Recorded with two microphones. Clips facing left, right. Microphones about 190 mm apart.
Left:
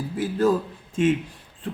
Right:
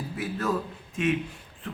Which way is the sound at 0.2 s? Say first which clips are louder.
Left 8 dB; 30° left (ahead or behind).